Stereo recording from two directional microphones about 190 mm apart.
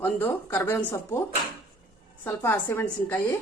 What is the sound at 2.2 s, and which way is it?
Speech, 10° left (ahead or behind).